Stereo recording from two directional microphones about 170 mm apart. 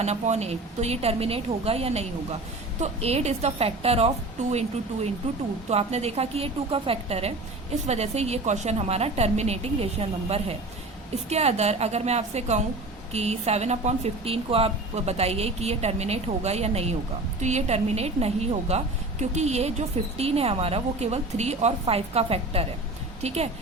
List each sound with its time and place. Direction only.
0.0 s speech: 40° right (ahead or behind)
5.6 s speech: 40° right (ahead or behind)